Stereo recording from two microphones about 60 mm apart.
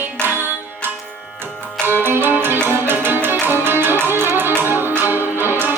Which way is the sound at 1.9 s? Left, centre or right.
Right.